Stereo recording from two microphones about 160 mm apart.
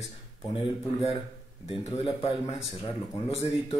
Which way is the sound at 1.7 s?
35° left (ahead or behind).